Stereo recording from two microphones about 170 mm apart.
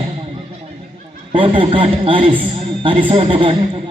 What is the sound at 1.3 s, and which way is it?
A man's voice, 30° right (ahead or behind).